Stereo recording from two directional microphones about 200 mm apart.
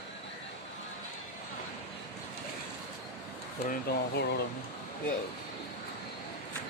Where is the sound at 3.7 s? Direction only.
55° left (ahead or behind).